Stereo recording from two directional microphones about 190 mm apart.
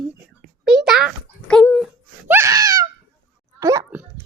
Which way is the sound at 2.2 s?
15° right (ahead or behind).